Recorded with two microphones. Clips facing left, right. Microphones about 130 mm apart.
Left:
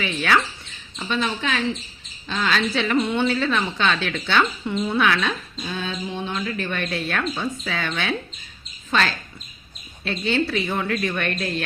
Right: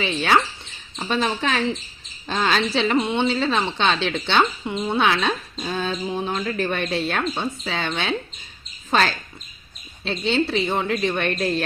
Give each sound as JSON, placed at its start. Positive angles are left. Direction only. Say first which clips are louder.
{"t": 0.0, "sound": "speech", "louder": "right 2 dB", "side_deg": -25}
{"t": 0.9, "sound": "a woman's voice", "louder": "right 2 dB", "side_deg": -35}
{"t": 5.6, "sound": "speech", "louder": "right 4 dB", "side_deg": -35}
{"t": 8.9, "sound": "a woman's voice", "louder": "right 2 dB", "side_deg": -35}
{"t": 10.0, "sound": "speech", "louder": "right 1 dB", "side_deg": -25}